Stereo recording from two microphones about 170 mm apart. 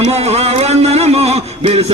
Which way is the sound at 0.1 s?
40° right (ahead or behind).